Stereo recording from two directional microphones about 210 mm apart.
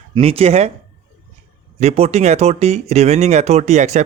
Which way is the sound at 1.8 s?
30° right (ahead or behind).